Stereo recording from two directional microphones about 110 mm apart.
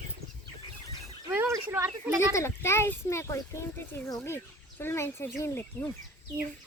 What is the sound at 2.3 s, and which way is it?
A child's voice, 25° left (ahead or behind).